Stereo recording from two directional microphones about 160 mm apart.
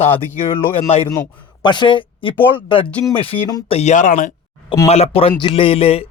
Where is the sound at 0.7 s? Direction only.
45° left (ahead or behind).